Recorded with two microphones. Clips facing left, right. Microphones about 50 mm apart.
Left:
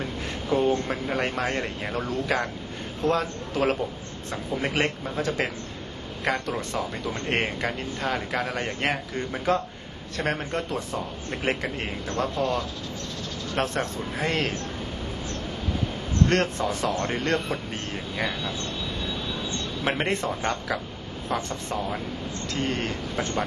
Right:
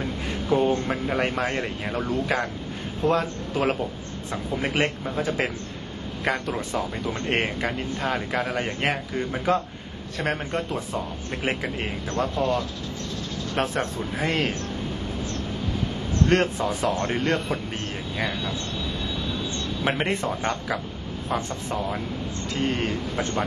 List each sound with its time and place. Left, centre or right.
0.5 s a man's voice: centre
12.4 s speech: right
13.6 s a man's voice: centre
16.3 s a man's voice: centre
19.8 s a man's voice: centre